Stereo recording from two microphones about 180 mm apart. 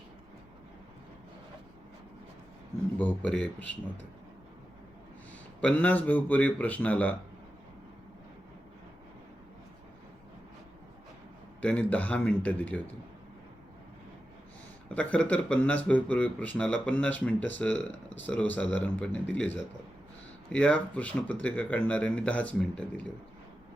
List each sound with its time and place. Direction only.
3.0 s speech: 10° left (ahead or behind)
5.5 s speech: 10° left (ahead or behind)
11.6 s speech: 5° left (ahead or behind)
14.8 s speech: 5° left (ahead or behind)